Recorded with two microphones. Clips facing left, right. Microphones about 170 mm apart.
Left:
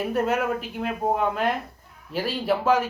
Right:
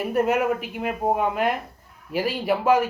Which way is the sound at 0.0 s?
10° right (ahead or behind).